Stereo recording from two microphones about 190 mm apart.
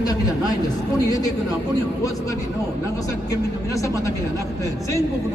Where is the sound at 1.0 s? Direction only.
20° left (ahead or behind).